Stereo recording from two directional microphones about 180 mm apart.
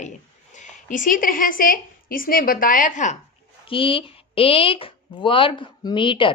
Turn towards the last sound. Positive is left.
turn(degrees=30)  # may be behind; listen again after turning